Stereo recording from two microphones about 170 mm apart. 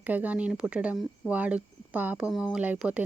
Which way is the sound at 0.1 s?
10° right (ahead or behind).